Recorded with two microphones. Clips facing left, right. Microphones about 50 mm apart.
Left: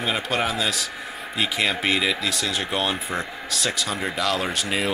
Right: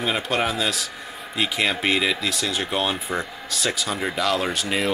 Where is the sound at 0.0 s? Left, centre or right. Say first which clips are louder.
Right 1 dB; centre.